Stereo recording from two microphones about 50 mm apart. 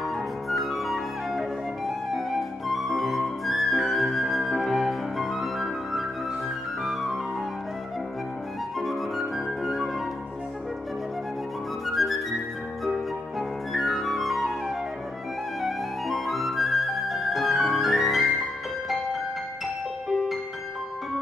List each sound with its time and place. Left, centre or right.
0.0 s flute: centre
8.7 s flute: centre
11.8 s music: centre
12.8 s flute: centre
15.6 s music: centre